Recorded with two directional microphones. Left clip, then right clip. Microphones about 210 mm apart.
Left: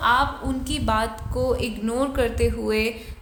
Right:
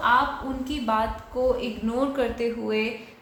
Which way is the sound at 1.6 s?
35° left (ahead or behind).